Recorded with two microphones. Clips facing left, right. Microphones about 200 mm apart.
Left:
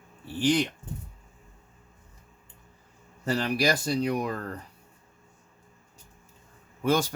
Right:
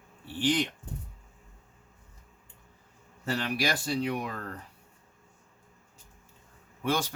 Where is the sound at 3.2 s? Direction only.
40° left (ahead or behind).